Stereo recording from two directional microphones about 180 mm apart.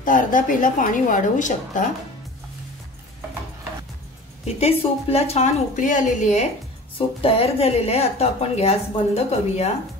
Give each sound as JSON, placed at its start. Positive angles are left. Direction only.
{"t": 0.0, "sound": "a woman's voice", "side_deg": 50}
{"t": 4.6, "sound": "a woman's voice", "side_deg": 35}